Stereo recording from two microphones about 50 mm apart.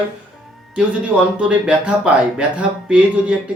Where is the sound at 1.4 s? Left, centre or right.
Centre.